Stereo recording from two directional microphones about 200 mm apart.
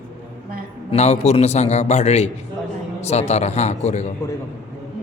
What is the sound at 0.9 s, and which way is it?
A man's voice, 30° left (ahead or behind).